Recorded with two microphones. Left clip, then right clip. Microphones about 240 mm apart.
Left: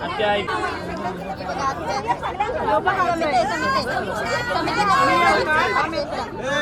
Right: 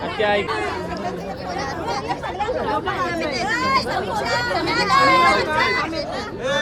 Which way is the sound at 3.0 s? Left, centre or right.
Centre.